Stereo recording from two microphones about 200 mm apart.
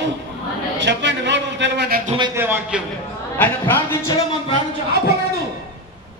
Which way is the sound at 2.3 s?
10° right (ahead or behind).